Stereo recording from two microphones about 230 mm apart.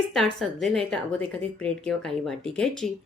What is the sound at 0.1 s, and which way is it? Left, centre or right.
Speech, centre.